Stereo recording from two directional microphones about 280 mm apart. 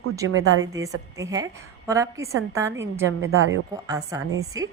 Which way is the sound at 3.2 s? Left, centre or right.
Right.